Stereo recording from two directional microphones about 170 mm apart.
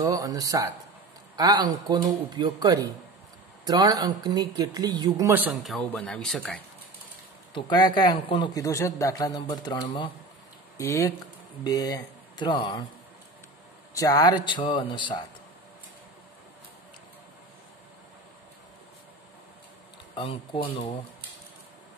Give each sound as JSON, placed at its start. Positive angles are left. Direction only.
{"t": 0.0, "sound": "speech", "side_deg": -20}
{"t": 7.5, "sound": "a man's voice", "side_deg": 25}
{"t": 8.6, "sound": "a man's voice", "side_deg": 15}
{"t": 10.8, "sound": "a man's voice", "side_deg": 20}
{"t": 13.9, "sound": "a man's voice", "side_deg": 20}
{"t": 20.2, "sound": "speech", "side_deg": 30}